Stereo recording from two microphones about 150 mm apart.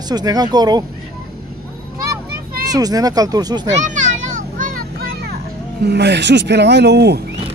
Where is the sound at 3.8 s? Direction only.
55° right (ahead or behind); by 5.3 s 85° right.